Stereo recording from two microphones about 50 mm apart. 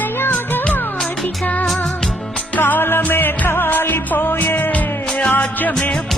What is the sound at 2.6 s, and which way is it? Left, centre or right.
Music, left.